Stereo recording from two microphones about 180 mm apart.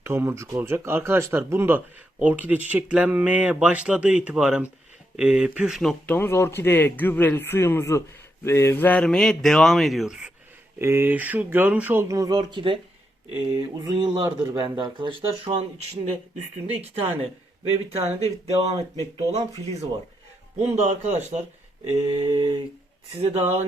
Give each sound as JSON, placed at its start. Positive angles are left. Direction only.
{"t": 0.0, "sound": "a man's voice", "side_deg": -15}
{"t": 10.8, "sound": "speech", "side_deg": -15}
{"t": 17.6, "sound": "speech", "side_deg": -30}